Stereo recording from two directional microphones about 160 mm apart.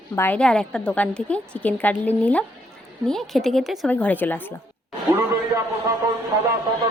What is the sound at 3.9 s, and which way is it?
Speech, 10° left (ahead or behind).